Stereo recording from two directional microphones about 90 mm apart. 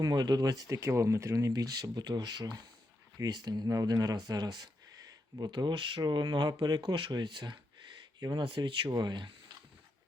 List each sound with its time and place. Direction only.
0.0 s speech: 50° right (ahead or behind)
8.4 s speech: 65° right (ahead or behind)